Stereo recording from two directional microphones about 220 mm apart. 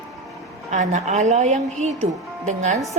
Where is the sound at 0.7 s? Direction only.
30° right (ahead or behind).